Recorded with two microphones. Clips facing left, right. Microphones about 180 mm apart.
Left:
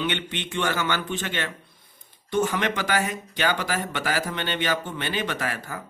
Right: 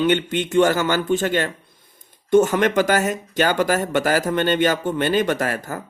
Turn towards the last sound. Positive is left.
turn(degrees=-45)  # may be behind; listen again after turning